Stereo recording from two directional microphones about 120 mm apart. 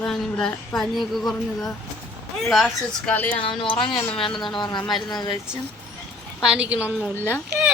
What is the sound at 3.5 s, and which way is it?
Speech, 45° left (ahead or behind).